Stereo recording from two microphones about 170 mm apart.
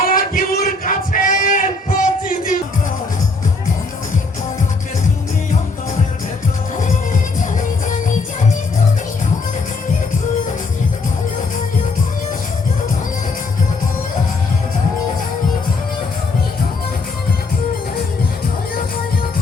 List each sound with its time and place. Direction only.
0.0 s music: 55° left (ahead or behind)